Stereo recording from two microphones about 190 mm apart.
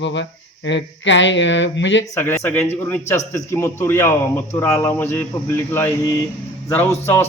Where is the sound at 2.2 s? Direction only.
10° left (ahead or behind).